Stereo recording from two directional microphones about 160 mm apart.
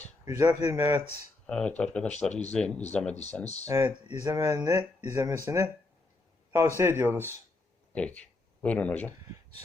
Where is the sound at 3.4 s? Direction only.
45° left (ahead or behind).